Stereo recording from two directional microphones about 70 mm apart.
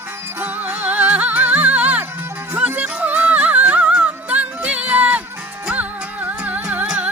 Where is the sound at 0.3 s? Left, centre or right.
Right.